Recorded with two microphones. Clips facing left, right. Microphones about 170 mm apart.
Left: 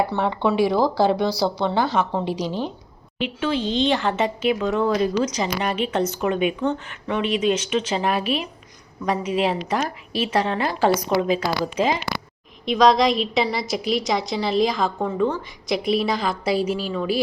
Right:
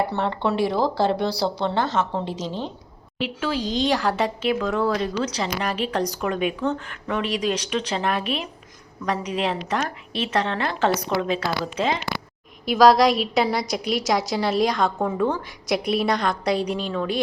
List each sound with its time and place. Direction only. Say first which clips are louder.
0.2 s a woman's voice: left 3 dB; 5° left (ahead or behind)
2.3 s a woman's voice: left 4 dB; 25° right (ahead or behind)
3.2 s a woman's voice: left 2 dB; centre (ahead or behind)
3.6 s speech: left 1 dB; 40° right (ahead or behind)
3.9 s a woman's voice: left 1 dB; centre (ahead or behind)
12.6 s a woman's voice: right 1 dB; 5° right (ahead or behind)